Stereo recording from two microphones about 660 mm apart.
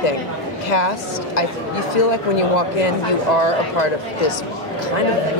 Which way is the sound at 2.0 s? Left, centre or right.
Left.